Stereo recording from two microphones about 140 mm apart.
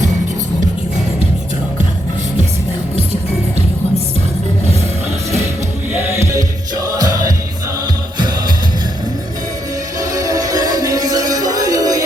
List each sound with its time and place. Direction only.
5.9 s music: 20° right (ahead or behind)
10.0 s music: 25° right (ahead or behind)